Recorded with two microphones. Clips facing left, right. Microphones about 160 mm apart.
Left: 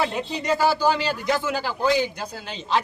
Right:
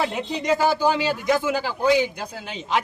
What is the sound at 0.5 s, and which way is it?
A man's voice, 15° right (ahead or behind).